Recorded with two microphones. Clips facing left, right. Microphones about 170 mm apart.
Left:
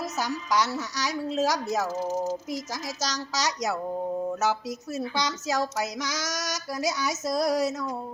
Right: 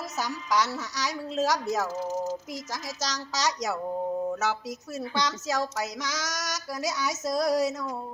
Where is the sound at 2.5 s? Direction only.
10° left (ahead or behind).